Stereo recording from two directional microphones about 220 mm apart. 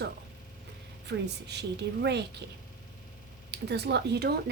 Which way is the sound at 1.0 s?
50° right (ahead or behind).